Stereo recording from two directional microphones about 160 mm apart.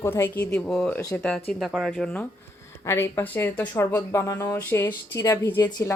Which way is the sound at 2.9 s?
15° left (ahead or behind).